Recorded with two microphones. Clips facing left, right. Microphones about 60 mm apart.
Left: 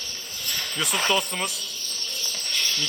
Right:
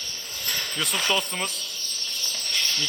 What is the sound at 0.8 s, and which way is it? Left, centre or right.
Speech, centre.